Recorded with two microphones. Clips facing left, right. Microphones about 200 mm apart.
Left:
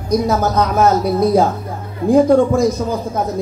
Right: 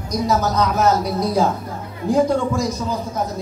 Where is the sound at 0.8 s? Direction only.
55° left (ahead or behind).